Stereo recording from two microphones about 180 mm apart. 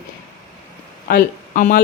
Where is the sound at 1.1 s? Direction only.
55° left (ahead or behind).